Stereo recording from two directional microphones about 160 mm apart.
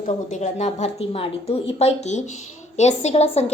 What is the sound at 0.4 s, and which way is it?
A woman's voice, 45° left (ahead or behind).